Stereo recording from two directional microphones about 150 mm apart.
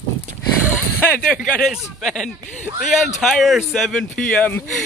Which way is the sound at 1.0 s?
15° left (ahead or behind).